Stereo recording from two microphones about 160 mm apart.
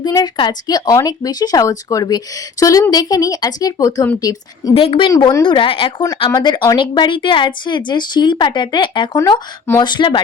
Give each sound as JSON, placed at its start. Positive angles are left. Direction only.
{"t": 0.0, "sound": "speech", "side_deg": 25}
{"t": 4.7, "sound": "speech", "side_deg": 35}